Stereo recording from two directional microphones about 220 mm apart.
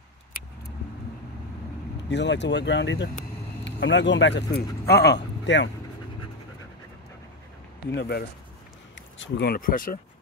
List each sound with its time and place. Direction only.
2.0 s speech: 55° left (ahead or behind)
7.9 s speech: 50° left (ahead or behind)